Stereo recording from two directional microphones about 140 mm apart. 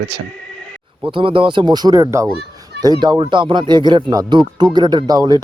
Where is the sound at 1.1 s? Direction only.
40° right (ahead or behind); by 2.3 s 25° right (ahead or behind).